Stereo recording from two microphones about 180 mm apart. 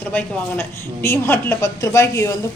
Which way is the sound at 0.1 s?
10° left (ahead or behind).